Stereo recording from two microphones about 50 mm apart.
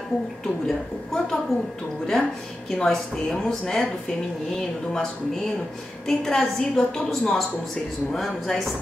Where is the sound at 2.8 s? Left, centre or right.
Centre.